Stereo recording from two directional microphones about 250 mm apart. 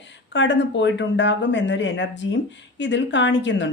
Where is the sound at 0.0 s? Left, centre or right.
Left.